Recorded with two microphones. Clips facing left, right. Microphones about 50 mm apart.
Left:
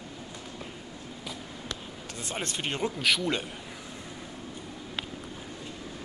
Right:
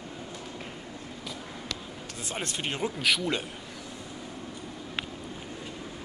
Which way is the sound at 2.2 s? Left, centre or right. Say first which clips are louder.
Even; centre.